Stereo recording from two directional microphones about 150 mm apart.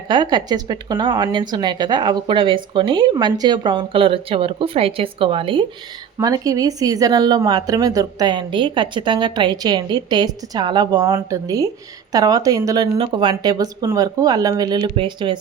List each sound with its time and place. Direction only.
0.1 s speech: 30° right (ahead or behind)
6.1 s speech: 25° right (ahead or behind)